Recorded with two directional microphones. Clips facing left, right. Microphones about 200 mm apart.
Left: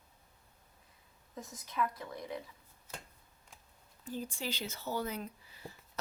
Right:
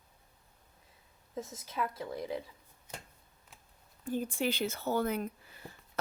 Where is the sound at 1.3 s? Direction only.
25° right (ahead or behind).